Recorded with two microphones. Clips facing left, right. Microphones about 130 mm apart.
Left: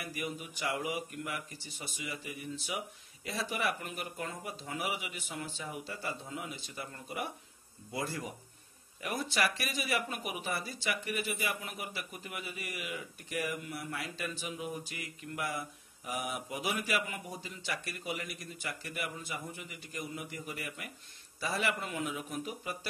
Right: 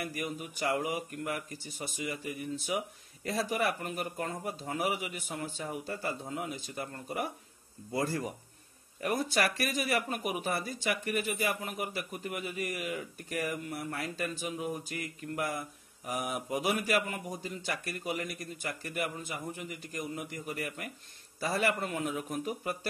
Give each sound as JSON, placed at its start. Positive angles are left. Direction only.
{"t": 0.0, "sound": "speech", "side_deg": -45}